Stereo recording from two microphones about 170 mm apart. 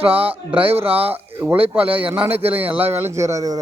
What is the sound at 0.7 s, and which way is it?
A man's voice, 10° right (ahead or behind).